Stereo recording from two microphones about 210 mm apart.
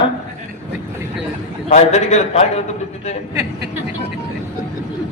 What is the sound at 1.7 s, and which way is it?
Speech, 35° left (ahead or behind).